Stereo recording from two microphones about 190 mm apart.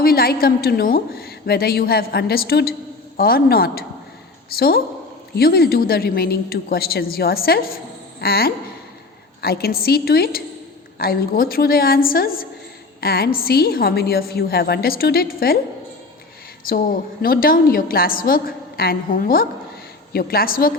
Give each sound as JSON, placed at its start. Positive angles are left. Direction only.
{"t": 0.0, "sound": "a woman's voice", "side_deg": 50}
{"t": 17.2, "sound": "a woman's voice", "side_deg": 50}